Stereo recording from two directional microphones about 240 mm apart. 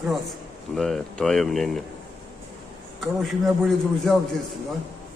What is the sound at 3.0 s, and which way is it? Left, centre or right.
A man's voice, centre.